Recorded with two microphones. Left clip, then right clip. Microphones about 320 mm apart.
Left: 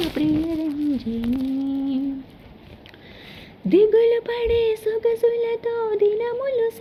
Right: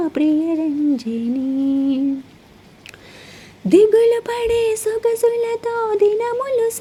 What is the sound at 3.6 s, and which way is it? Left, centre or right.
Speech, right.